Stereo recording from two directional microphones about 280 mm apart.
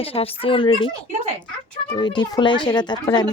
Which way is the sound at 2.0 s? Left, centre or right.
Centre.